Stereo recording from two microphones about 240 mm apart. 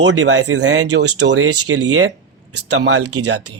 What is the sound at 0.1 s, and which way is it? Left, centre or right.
Speech, right.